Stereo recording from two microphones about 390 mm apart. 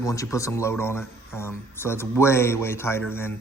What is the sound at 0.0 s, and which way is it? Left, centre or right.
Speech, centre.